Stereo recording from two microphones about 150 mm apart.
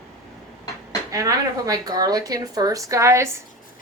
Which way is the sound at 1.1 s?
25° right (ahead or behind).